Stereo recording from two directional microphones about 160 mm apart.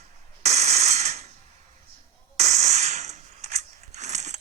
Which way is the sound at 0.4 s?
45° right (ahead or behind).